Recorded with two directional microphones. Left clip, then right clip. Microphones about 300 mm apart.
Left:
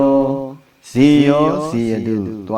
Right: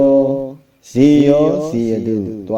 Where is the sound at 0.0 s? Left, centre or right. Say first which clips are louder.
Right 2 dB; centre.